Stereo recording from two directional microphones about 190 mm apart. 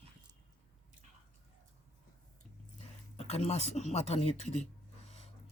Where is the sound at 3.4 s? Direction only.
35° left (ahead or behind).